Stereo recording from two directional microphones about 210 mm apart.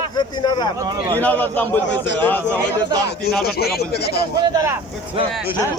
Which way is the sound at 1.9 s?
55° left (ahead or behind).